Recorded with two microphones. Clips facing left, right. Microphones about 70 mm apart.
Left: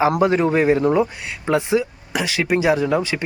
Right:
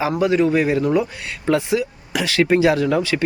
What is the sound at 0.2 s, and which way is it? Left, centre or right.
Speech, left.